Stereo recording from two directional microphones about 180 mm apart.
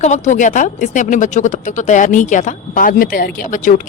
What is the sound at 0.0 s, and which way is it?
Speech, 40° left (ahead or behind).